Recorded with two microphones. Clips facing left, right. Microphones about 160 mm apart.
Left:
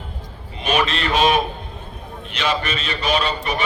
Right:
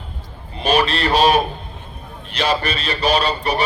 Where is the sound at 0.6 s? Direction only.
35° right (ahead or behind).